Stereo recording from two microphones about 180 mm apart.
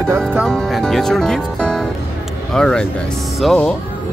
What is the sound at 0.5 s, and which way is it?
Music, centre (ahead or behind).